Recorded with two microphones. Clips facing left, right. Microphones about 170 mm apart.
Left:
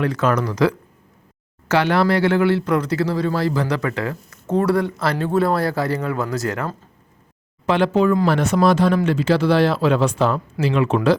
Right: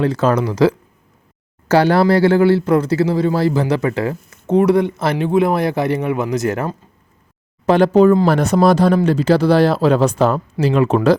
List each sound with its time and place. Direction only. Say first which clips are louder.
0.0 s speech: right 4 dB; 30° right (ahead or behind)
7.7 s speech: right 6 dB; 40° right (ahead or behind)